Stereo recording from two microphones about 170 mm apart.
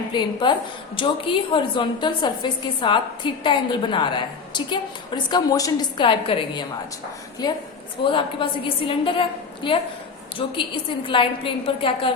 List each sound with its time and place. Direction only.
0.1 s a woman's voice: 25° left (ahead or behind)